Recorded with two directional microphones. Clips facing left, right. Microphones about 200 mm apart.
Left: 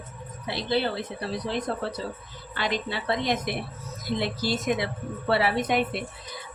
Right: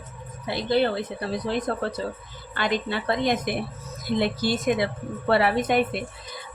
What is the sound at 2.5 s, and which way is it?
Speech, 50° right (ahead or behind).